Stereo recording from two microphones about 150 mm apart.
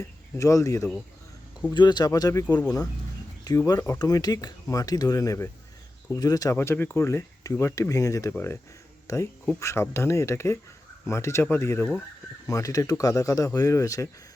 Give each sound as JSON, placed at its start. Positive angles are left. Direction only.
{"t": 0.0, "sound": "speech", "side_deg": 20}
{"t": 3.7, "sound": "speech", "side_deg": 20}